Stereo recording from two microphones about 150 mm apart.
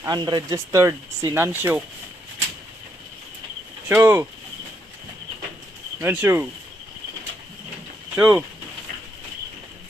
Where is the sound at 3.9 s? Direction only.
15° right (ahead or behind).